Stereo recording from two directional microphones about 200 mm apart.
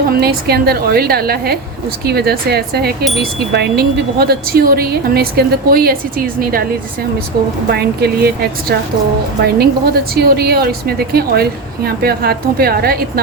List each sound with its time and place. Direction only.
0.2 s a woman's voice: 50° right (ahead or behind)
7.7 s a woman's voice: 55° right (ahead or behind)